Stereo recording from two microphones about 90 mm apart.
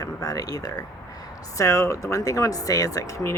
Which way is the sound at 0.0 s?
40° left (ahead or behind).